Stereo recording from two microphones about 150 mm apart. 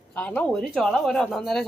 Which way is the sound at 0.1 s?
10° left (ahead or behind).